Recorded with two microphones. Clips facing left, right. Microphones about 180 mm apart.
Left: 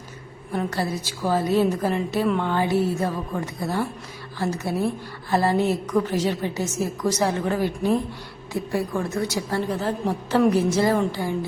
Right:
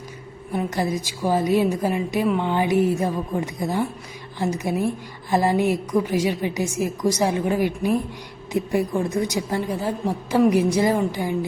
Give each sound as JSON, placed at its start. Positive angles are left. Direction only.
{"t": 0.5, "sound": "a woman's voice", "side_deg": -15}